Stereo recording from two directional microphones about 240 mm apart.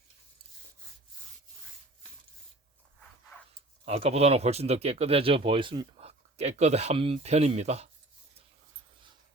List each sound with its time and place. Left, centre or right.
3.8 s speech: right